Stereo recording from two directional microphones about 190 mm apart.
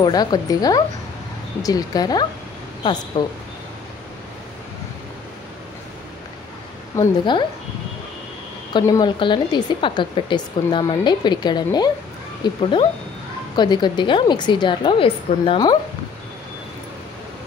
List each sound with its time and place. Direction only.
0.0 s speech: 20° left (ahead or behind)
7.0 s speech: 25° left (ahead or behind)
8.7 s speech: 20° left (ahead or behind)